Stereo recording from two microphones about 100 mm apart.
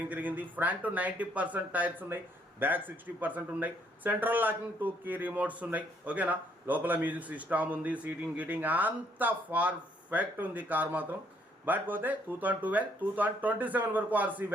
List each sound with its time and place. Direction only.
0.0 s speech: 15° right (ahead or behind)